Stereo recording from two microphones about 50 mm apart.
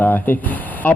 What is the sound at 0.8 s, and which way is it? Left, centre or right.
Speech, left.